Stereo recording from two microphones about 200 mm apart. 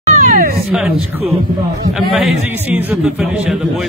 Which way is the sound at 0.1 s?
45° right (ahead or behind).